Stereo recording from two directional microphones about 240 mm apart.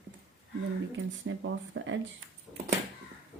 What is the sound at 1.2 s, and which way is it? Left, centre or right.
Speech, right.